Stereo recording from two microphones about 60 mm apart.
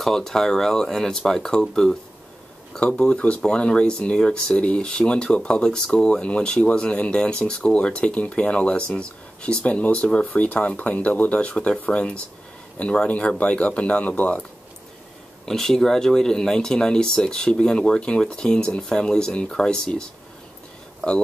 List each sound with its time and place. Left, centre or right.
0.0 s speech: centre; by 14.4 s left
15.4 s speech: centre